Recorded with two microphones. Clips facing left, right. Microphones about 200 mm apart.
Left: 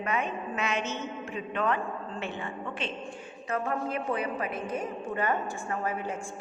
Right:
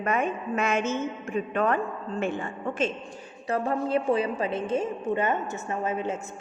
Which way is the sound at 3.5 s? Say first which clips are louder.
Right 5 dB; 30° right (ahead or behind).